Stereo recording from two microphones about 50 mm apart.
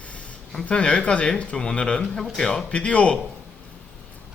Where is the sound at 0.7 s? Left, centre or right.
Left.